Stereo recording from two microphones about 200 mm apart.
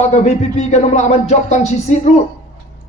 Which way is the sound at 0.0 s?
35° left (ahead or behind).